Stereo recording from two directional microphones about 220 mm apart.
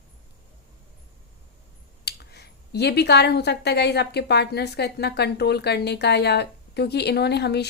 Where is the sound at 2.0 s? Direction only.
45° left (ahead or behind).